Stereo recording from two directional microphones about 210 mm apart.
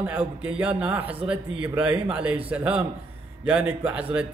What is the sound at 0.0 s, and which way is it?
A man's voice, 5° right (ahead or behind).